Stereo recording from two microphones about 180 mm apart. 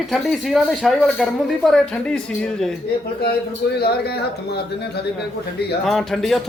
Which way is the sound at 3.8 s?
60° left (ahead or behind).